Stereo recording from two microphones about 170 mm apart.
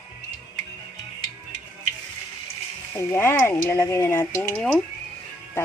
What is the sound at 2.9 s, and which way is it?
Speech, 15° left (ahead or behind).